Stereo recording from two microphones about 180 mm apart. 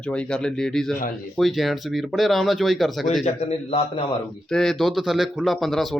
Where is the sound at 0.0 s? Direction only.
5° left (ahead or behind).